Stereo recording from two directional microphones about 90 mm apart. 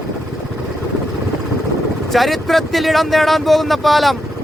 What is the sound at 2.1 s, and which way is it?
Speech, centre (ahead or behind).